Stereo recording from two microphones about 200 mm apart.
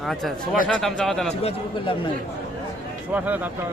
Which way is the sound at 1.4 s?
25° left (ahead or behind).